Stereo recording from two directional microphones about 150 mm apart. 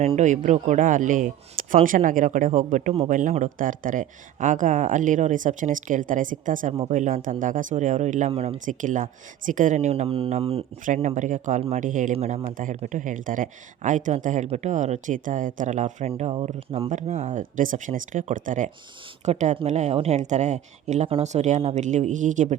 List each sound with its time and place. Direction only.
0.0 s speech: 45° right (ahead or behind)
8.3 s speech: 40° right (ahead or behind)
8.6 s speech: 60° right (ahead or behind); by 10.7 s 40° right (ahead or behind)
10.8 s speech: 55° right (ahead or behind)
12.1 s speech: 45° right (ahead or behind)
12.7 s speech: 55° right (ahead or behind); by 16.9 s 40° right (ahead or behind)
16.9 s speech: 50° right (ahead or behind)